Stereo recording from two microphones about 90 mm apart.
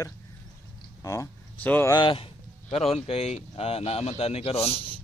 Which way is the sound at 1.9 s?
70° left (ahead or behind).